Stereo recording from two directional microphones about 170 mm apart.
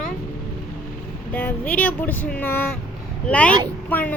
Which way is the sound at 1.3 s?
10° left (ahead or behind).